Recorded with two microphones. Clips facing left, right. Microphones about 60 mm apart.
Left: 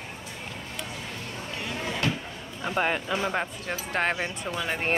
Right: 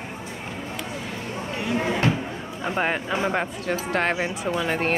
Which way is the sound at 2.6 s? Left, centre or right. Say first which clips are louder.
Right 2 dB; centre.